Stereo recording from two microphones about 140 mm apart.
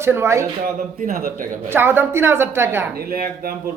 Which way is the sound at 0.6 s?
90° right.